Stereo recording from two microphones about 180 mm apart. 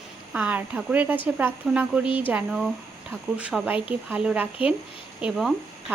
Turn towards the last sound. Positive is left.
turn(degrees=0)  # may be behind; listen again after turning